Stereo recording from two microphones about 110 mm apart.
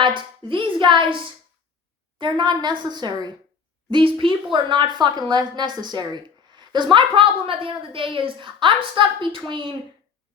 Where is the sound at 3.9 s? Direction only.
50° right (ahead or behind).